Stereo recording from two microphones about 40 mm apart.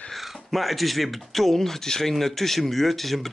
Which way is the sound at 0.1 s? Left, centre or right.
Centre.